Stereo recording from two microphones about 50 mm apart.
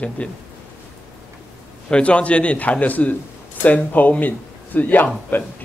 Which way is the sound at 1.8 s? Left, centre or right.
Left.